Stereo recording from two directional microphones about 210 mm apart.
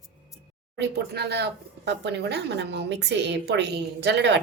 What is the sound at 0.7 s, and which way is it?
Speech, 50° right (ahead or behind).